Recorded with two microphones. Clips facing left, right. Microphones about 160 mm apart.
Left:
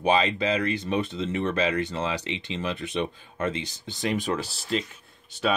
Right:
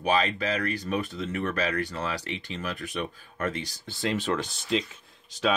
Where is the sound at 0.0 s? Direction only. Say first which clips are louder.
Left 3 dB; 25° left (ahead or behind).